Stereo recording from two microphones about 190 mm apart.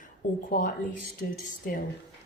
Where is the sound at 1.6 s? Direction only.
45° left (ahead or behind).